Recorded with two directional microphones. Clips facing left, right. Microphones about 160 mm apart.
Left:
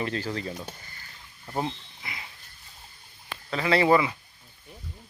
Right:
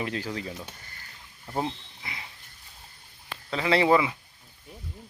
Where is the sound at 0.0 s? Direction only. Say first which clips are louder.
Left 1 dB; 10° right (ahead or behind).